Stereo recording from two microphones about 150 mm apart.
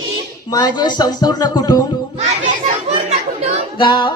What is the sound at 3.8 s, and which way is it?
Music, 30° left (ahead or behind).